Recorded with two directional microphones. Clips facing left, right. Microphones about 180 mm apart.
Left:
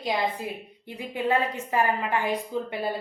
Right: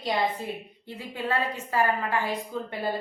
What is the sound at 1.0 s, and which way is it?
A woman's voice, 15° left (ahead or behind).